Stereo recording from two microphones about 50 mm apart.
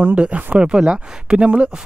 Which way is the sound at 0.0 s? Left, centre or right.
Right.